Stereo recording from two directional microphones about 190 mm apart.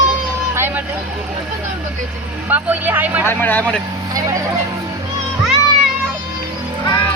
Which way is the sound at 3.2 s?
10° left (ahead or behind).